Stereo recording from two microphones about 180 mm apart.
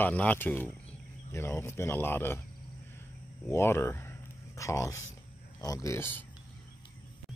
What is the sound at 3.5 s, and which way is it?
Speech, 15° left (ahead or behind).